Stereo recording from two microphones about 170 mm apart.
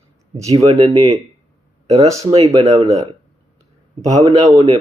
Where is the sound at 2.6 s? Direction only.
35° right (ahead or behind).